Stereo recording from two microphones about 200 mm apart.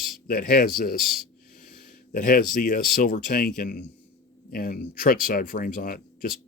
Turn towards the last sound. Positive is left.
turn(degrees=45)  # may be behind; listen again after turning